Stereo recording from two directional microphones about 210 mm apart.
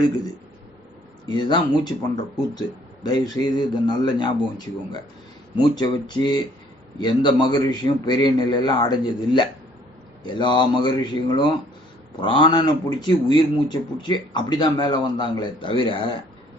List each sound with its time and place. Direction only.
1.3 s a man's voice: 20° left (ahead or behind)
3.6 s a man's voice: 20° left (ahead or behind)